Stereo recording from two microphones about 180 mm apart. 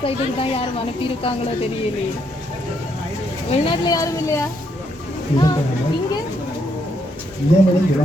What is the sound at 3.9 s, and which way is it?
Speech, 15° left (ahead or behind).